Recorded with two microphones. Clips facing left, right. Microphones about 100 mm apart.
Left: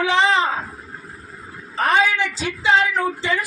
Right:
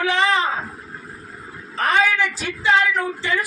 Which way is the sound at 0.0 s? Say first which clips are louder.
Left 2 dB; 20° left (ahead or behind).